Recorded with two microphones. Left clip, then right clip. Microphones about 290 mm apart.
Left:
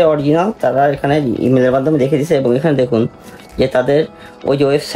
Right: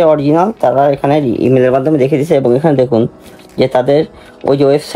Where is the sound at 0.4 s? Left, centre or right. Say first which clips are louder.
Right 3 dB; right.